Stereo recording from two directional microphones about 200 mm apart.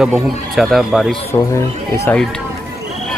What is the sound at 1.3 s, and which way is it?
Speech, 15° left (ahead or behind).